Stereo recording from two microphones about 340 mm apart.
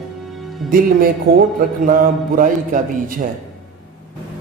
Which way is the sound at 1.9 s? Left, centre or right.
Right.